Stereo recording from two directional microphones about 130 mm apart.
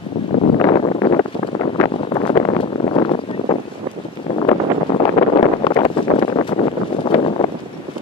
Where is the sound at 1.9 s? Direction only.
45° left (ahead or behind).